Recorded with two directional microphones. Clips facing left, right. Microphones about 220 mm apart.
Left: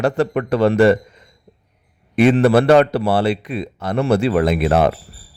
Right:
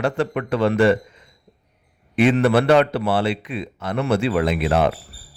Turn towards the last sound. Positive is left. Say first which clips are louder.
# left 3 dB
turn(degrees=45)  # may be behind; listen again after turning